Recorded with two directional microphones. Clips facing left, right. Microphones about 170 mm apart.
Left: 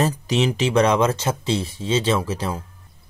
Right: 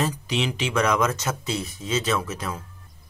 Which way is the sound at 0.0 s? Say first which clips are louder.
Left 5 dB; 40° left (ahead or behind).